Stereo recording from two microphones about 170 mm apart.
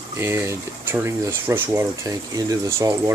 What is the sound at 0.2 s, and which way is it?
Speech, 15° right (ahead or behind).